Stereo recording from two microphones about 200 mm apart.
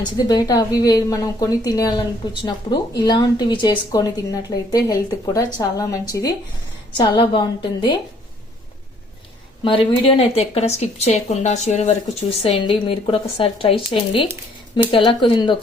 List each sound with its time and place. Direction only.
0.3 s speech: 20° left (ahead or behind)
9.6 s speech: 25° left (ahead or behind)